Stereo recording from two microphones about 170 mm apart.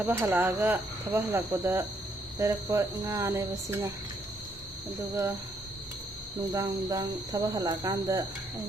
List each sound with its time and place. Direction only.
0.0 s speech: 10° right (ahead or behind)
5.1 s speech: 15° right (ahead or behind)
6.5 s speech: 20° right (ahead or behind)